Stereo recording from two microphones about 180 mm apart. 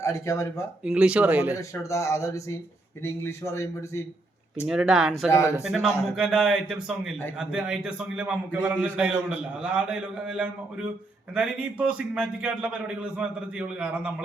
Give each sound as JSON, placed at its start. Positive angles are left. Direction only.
{"t": 0.0, "sound": "speech", "side_deg": 15}
{"t": 0.9, "sound": "speech", "side_deg": -5}
{"t": 1.5, "sound": "speech", "side_deg": 15}
{"t": 4.6, "sound": "a man's voice", "side_deg": -5}
{"t": 5.3, "sound": "speech", "side_deg": 15}
{"t": 5.5, "sound": "a man's voice", "side_deg": -5}